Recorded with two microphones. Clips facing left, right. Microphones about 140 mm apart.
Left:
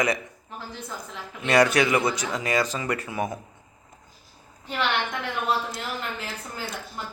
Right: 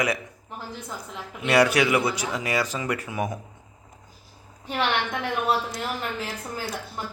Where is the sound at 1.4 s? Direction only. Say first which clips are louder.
Even; 10° right (ahead or behind).